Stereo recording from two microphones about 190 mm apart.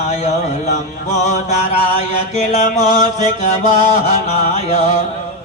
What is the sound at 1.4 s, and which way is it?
Mantra, 35° left (ahead or behind).